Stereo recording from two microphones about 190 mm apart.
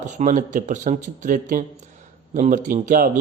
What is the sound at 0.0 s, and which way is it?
A man's voice, 40° right (ahead or behind).